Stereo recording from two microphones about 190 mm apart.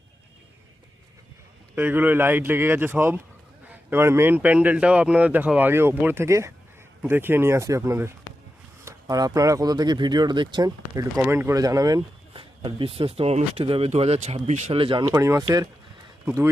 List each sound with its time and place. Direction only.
1.7 s speech: 10° right (ahead or behind)
12.3 s a man's voice: 30° right (ahead or behind)